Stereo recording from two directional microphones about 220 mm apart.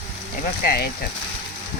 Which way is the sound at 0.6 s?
40° left (ahead or behind).